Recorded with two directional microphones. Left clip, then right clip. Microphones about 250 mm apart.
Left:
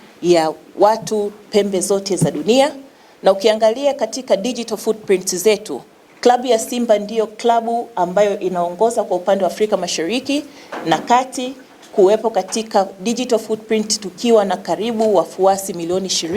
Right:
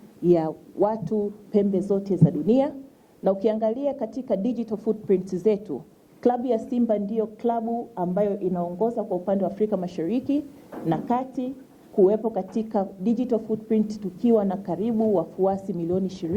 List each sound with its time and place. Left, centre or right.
0.3 s a woman's voice: centre
7.6 s speech: left
7.9 s speech: centre
8.6 s speech: left
9.2 s a woman's voice: centre